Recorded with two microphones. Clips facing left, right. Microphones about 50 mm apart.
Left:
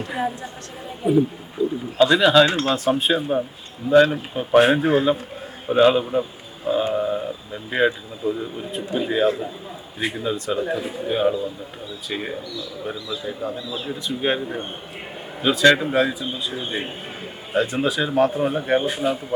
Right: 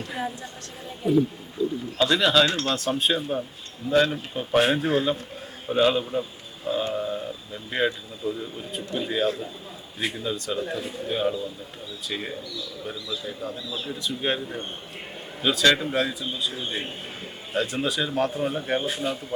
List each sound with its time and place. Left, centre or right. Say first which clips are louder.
0.0 s speech: left 5 dB; centre